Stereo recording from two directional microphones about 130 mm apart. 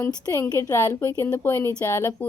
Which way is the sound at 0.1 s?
30° left (ahead or behind).